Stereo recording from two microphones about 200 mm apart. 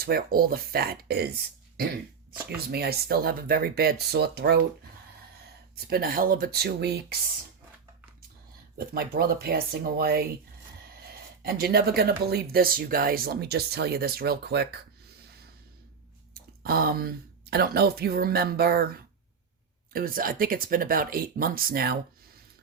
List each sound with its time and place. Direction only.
0.0 s speech: 50° right (ahead or behind)
2.6 s speech: 55° right (ahead or behind)
5.7 s speech: 50° right (ahead or behind)
8.9 s speech: 50° right (ahead or behind)
16.6 s speech: 50° right (ahead or behind)